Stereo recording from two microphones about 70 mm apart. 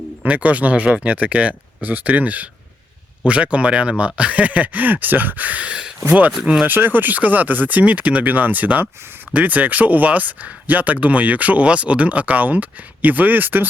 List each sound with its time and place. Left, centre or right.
0.2 s speech: centre
6.7 s speech: right